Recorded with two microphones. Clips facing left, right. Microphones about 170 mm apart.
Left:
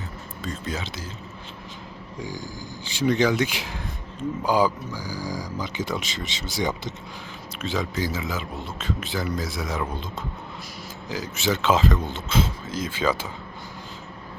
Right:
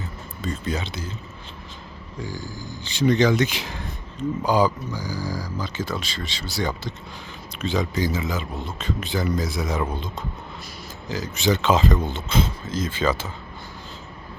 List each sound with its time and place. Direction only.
0.4 s speech: centre (ahead or behind)
2.1 s speech: 15° left (ahead or behind)
7.6 s speech: centre (ahead or behind)
11.1 s speech: 5° left (ahead or behind)